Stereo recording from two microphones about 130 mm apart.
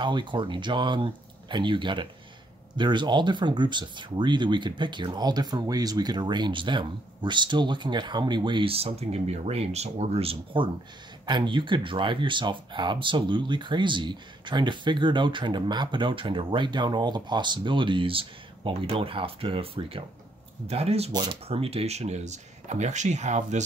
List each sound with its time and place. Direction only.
0.0 s speech: 35° right (ahead or behind)
21.1 s speech: 35° right (ahead or behind)
21.5 s speech: 50° right (ahead or behind)